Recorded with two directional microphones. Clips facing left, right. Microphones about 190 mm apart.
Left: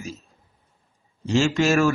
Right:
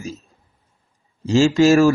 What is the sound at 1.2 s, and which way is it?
Speech, 35° right (ahead or behind).